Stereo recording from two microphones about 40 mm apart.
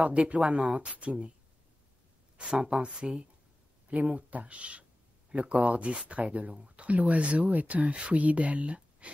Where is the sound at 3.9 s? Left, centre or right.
Right.